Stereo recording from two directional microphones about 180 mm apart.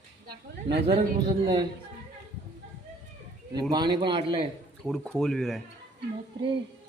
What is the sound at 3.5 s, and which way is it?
Speech, 25° right (ahead or behind).